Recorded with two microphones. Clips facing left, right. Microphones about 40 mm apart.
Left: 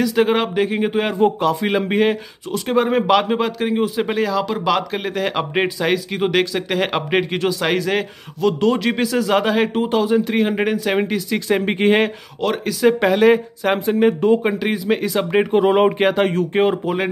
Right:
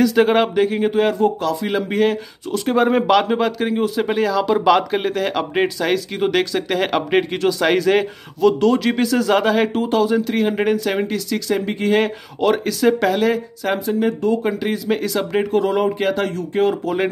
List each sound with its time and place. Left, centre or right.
0.0 s a man's voice: centre
1.2 s speech: left
1.9 s speech: centre
2.5 s a man's voice: centre; by 12.0 s left
12.4 s a man's voice: centre
12.8 s speech: centre
13.8 s speech: left
16.6 s speech: centre